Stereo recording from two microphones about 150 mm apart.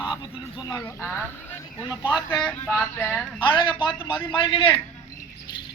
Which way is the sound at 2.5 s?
10° left (ahead or behind).